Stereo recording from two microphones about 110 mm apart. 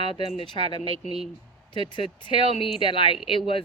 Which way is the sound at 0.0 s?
50° left (ahead or behind).